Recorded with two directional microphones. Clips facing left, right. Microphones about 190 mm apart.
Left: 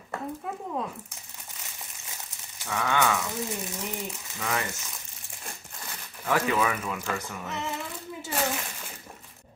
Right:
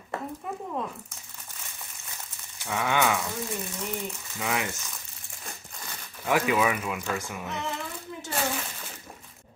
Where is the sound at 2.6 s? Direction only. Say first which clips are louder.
Right 1 dB; 15° right (ahead or behind).